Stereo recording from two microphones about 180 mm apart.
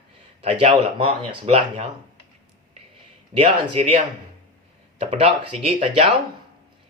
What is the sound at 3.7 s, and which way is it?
Speech, 35° right (ahead or behind).